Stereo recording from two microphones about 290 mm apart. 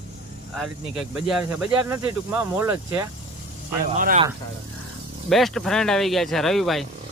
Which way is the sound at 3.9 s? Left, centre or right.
Right.